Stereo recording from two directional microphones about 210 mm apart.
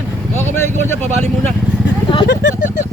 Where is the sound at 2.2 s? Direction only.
55° left (ahead or behind).